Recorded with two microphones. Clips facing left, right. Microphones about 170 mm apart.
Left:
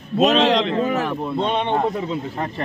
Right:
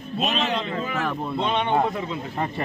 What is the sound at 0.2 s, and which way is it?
Speech, 90° left.